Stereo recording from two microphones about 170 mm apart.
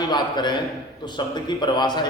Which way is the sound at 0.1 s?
25° left (ahead or behind).